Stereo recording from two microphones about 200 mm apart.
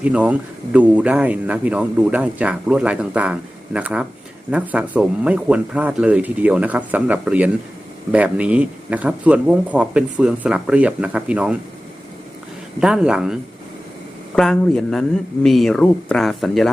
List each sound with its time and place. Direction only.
0.0 s speech: 5° right (ahead or behind)
12.8 s speech: 5° right (ahead or behind)